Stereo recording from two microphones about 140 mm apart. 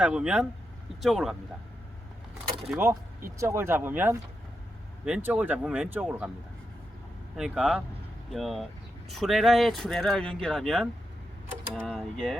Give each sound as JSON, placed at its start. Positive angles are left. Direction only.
{"t": 0.0, "sound": "speech", "side_deg": -5}
{"t": 2.6, "sound": "speech", "side_deg": -15}
{"t": 7.3, "sound": "speech", "side_deg": -5}
{"t": 11.9, "sound": "speech", "side_deg": 0}